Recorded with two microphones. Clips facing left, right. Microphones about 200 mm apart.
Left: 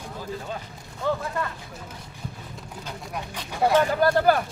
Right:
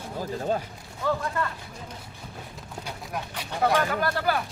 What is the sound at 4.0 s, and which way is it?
Speech, 40° left (ahead or behind).